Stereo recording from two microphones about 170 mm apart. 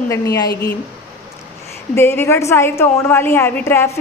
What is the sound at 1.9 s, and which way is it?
A woman's voice, 15° left (ahead or behind).